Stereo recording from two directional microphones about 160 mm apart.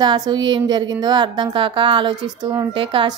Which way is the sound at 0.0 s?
25° right (ahead or behind).